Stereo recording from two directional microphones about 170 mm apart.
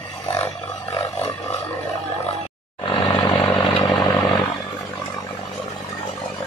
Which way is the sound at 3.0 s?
25° left (ahead or behind).